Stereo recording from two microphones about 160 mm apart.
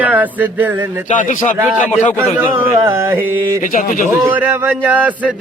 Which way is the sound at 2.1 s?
15° right (ahead or behind).